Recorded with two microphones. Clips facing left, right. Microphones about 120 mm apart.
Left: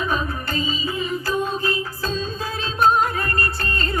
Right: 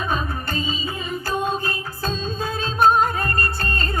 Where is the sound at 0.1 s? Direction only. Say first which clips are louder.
Left 1 dB; 30° right (ahead or behind).